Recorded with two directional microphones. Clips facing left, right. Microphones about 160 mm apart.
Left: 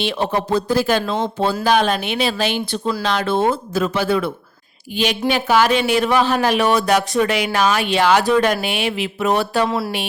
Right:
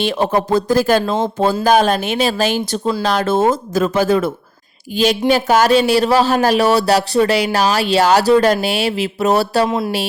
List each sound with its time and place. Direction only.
0.0 s speech: 45° right (ahead or behind)
5.3 s speech: 40° right (ahead or behind)
9.6 s speech: 20° right (ahead or behind)